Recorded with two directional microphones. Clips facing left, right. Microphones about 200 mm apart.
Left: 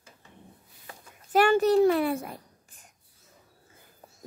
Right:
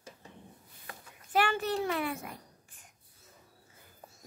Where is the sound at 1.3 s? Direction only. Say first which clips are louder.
Left 9 dB; 40° left (ahead or behind).